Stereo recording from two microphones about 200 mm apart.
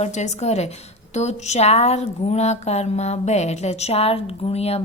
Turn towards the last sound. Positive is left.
turn(degrees=30)  # may be behind; listen again after turning